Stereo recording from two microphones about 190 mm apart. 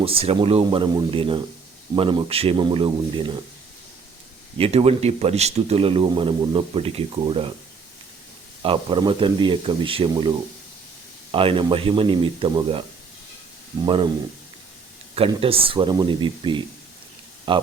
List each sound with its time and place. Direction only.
0.0 s speech: 30° right (ahead or behind)
4.5 s a man's voice: 30° right (ahead or behind)
8.6 s speech: 25° right (ahead or behind)
13.8 s speech: 25° right (ahead or behind)
15.3 s speech: 30° right (ahead or behind)